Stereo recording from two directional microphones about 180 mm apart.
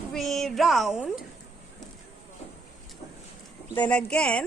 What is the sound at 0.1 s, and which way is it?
A woman's voice, centre (ahead or behind).